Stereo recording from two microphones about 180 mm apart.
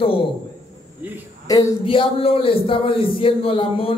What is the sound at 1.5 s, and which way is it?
A man's voice, 25° left (ahead or behind).